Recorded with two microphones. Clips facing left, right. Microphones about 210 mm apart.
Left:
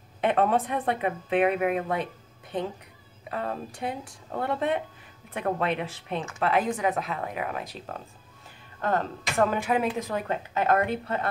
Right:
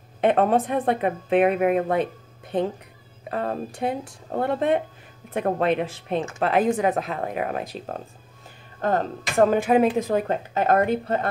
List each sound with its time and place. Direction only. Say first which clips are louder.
0.2 s a woman's voice: right 4 dB; 40° right (ahead or behind)
3.3 s a woman's voice: right 5 dB; 45° right (ahead or behind)